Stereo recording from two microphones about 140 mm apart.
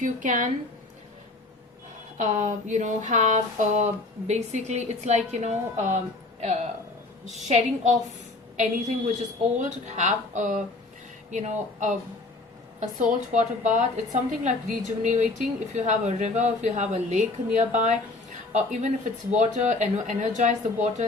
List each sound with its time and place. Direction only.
0.0 s a woman's voice: 65° right (ahead or behind)
2.1 s a woman's voice: 60° right (ahead or behind)
13.0 s a woman's voice: 65° right (ahead or behind)